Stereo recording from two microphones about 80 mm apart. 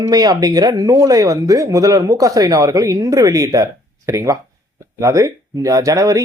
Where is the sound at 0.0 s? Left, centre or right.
Right.